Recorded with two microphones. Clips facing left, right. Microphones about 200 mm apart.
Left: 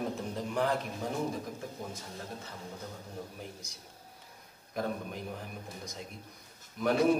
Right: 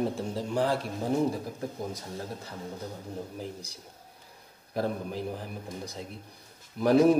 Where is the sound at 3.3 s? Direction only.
30° right (ahead or behind).